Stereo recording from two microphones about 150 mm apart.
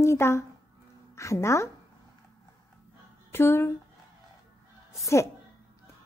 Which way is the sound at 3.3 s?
15° left (ahead or behind).